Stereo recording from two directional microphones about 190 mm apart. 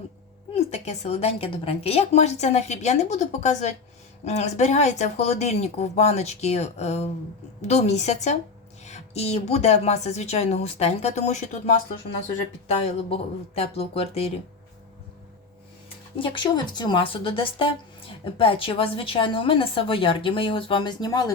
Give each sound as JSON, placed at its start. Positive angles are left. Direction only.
{"t": 0.5, "sound": "a woman's voice", "side_deg": 35}
{"t": 16.2, "sound": "speech", "side_deg": 25}